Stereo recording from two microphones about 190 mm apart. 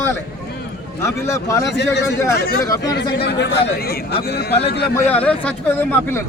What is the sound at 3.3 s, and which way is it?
Speech, 60° left (ahead or behind).